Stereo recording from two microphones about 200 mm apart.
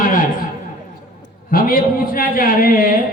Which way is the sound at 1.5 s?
45° left (ahead or behind).